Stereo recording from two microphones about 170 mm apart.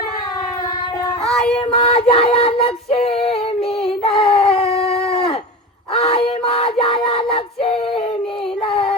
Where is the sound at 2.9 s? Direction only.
40° left (ahead or behind).